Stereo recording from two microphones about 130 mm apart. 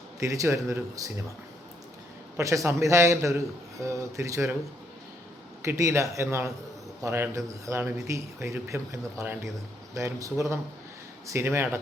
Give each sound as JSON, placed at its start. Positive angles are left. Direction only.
{"t": 0.2, "sound": "a man's voice", "side_deg": -25}
{"t": 2.4, "sound": "a man's voice", "side_deg": -25}
{"t": 5.6, "sound": "a man's voice", "side_deg": -20}